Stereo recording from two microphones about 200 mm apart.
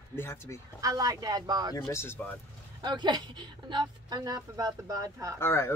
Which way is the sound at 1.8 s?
10° left (ahead or behind).